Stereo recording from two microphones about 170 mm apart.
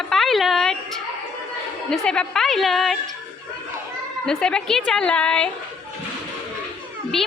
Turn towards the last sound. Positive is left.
turn(degrees=0)  # may be behind; listen again after turning